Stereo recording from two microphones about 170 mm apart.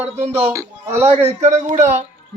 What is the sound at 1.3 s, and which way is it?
Speech, 40° right (ahead or behind).